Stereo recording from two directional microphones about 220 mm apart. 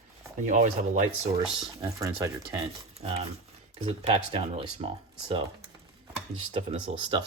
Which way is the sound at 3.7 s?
25° right (ahead or behind).